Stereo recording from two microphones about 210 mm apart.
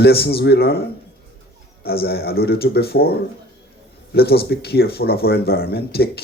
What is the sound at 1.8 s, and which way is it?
Speech, 50° left (ahead or behind).